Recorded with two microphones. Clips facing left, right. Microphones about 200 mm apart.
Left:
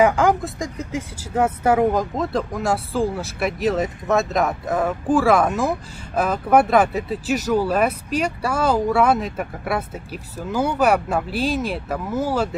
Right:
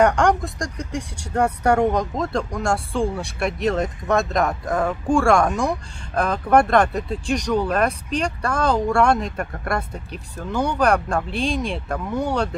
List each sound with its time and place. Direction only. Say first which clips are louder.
0.0 s speech: left 1 dB; 5° left (ahead or behind)